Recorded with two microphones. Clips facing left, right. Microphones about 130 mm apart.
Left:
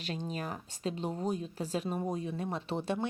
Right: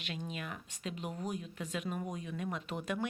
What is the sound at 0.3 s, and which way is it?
Speech, 35° left (ahead or behind).